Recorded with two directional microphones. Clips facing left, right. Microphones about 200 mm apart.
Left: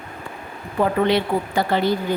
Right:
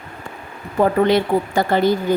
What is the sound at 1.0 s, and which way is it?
A woman's voice, 45° right (ahead or behind).